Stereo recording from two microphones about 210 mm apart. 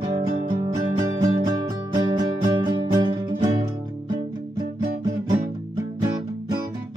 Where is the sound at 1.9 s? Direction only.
20° right (ahead or behind).